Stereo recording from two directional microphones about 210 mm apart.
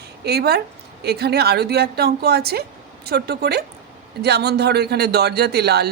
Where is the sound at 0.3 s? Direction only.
50° right (ahead or behind).